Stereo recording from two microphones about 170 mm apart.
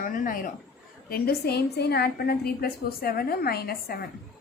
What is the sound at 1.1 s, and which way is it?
A woman's voice, 65° left (ahead or behind).